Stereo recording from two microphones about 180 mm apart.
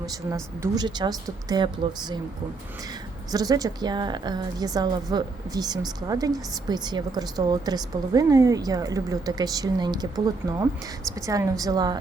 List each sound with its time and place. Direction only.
0.3 s a woman's voice: 15° right (ahead or behind)
3.3 s a woman's voice: 20° right (ahead or behind)